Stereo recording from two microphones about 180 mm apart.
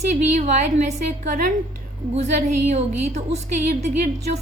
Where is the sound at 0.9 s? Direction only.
45° right (ahead or behind).